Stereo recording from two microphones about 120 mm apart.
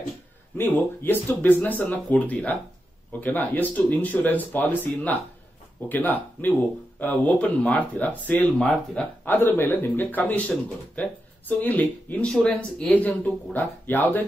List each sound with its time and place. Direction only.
0.6 s speech: 15° left (ahead or behind)
5.9 s speech: 15° left (ahead or behind)
9.2 s speech: 15° left (ahead or behind)